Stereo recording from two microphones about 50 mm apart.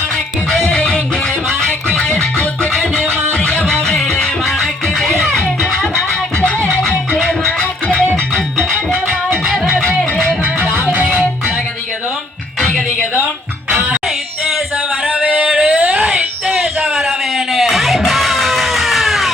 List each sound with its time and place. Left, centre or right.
0.7 s music: left
3.3 s music: left
3.9 s music: centre
7.3 s music: left
10.0 s music: centre
15.1 s music: right
15.5 s a sound: right
16.6 s music: centre